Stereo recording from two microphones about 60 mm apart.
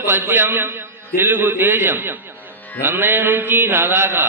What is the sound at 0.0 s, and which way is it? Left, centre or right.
A man's voice, right.